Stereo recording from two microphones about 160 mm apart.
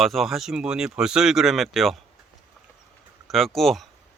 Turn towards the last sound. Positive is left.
turn(degrees=0)  # may be behind; listen again after turning